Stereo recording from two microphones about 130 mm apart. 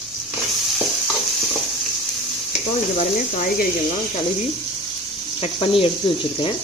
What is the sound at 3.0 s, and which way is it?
Speech, 90° left.